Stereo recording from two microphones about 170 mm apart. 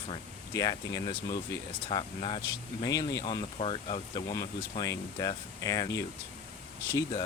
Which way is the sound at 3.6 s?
35° left (ahead or behind).